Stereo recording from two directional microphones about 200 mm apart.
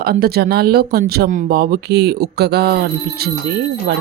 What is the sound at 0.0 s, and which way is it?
Speech, 50° right (ahead or behind).